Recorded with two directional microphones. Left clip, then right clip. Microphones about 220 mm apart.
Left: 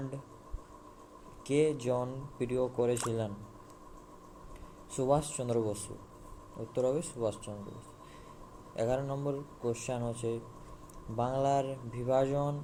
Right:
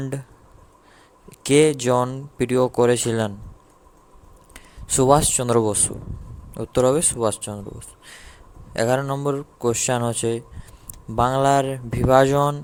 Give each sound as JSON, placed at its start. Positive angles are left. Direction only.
{"t": 1.5, "sound": "speech", "side_deg": -45}
{"t": 4.5, "sound": "speech", "side_deg": -45}
{"t": 8.7, "sound": "speech", "side_deg": -45}